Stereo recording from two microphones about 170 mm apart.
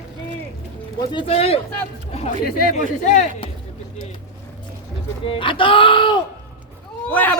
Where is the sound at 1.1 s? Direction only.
30° left (ahead or behind).